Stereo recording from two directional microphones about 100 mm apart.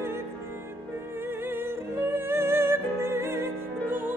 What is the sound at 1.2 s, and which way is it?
Music, 20° right (ahead or behind).